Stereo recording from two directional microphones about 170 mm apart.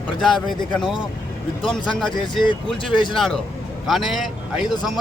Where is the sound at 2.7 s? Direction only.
Centre (ahead or behind).